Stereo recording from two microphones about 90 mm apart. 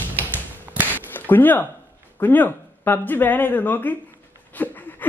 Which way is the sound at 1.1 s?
20° left (ahead or behind).